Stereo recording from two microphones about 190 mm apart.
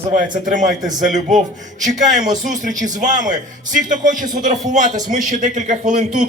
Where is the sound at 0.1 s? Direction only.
40° right (ahead or behind).